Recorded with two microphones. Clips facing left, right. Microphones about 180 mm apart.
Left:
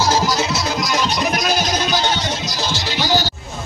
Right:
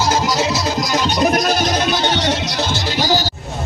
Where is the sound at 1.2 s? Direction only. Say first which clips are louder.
Right 4 dB; 45° right (ahead or behind).